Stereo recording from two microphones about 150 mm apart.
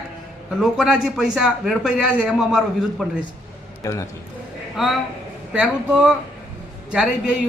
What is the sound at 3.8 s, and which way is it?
Speech, 20° left (ahead or behind).